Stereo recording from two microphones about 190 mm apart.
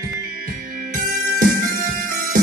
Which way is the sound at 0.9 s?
45° right (ahead or behind).